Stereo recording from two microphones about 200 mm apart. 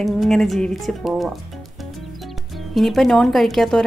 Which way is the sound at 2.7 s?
Centre (ahead or behind).